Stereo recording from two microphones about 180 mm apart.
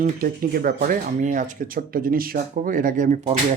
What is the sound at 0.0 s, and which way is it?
Speech, 50° right (ahead or behind).